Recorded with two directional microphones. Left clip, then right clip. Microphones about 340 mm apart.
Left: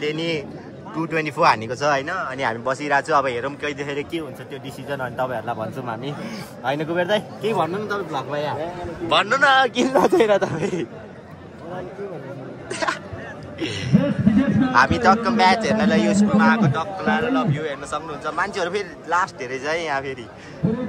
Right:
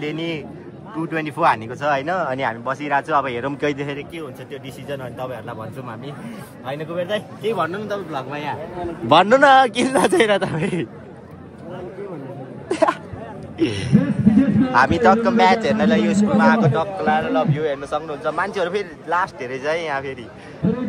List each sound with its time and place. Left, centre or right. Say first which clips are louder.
0.0 s a man's voice: left 2 dB; centre
6.8 s a man's voice: left 1 dB; centre
9.1 s a man's voice: right 5 dB; centre
12.6 s a man's voice: right 6 dB; centre